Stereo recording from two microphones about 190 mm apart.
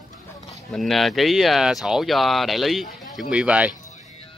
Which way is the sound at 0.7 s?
Centre (ahead or behind).